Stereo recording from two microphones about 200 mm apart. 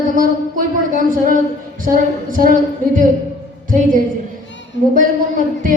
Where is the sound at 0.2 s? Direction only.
45° right (ahead or behind).